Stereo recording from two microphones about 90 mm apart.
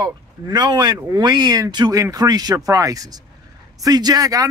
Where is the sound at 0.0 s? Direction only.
50° right (ahead or behind).